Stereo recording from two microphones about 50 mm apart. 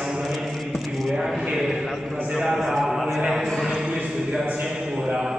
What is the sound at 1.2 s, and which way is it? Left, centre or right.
A man's voice, centre.